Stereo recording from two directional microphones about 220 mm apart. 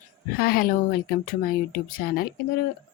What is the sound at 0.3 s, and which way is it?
Speech, 40° left (ahead or behind).